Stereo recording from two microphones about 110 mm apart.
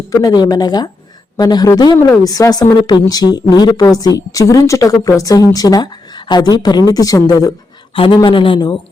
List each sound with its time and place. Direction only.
0.1 s a woman's voice: 35° left (ahead or behind)
7.9 s speech: 50° left (ahead or behind)